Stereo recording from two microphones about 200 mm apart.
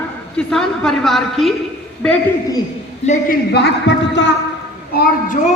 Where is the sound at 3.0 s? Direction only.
35° left (ahead or behind).